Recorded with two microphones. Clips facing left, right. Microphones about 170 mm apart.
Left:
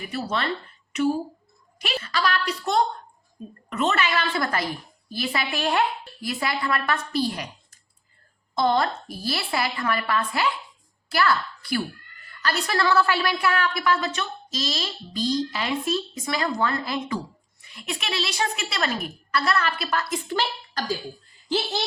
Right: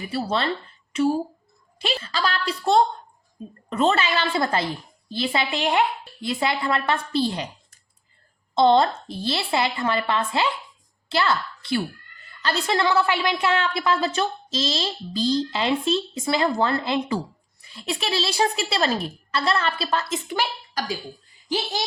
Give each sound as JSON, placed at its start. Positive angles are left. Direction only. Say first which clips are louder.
{"t": 0.0, "sound": "a woman's voice", "louder": "right 3 dB", "side_deg": -30}
{"t": 8.5, "sound": "a woman's voice", "louder": "right 5 dB", "side_deg": -25}